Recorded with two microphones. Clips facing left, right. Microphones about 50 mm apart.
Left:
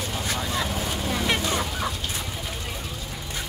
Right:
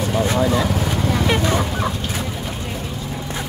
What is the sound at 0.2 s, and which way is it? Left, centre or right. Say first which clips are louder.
Vehicle: right 13 dB; right.